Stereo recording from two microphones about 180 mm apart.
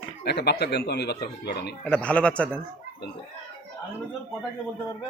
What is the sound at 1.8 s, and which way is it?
Speech, 5° left (ahead or behind).